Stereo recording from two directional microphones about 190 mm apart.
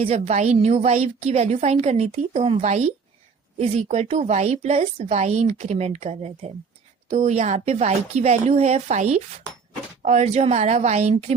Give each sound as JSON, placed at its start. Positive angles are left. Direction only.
{"t": 0.0, "sound": "a woman's voice", "side_deg": -35}